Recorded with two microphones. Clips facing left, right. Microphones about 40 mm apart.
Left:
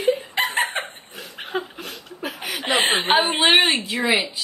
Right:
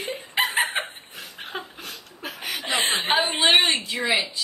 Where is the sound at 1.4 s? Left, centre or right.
Centre.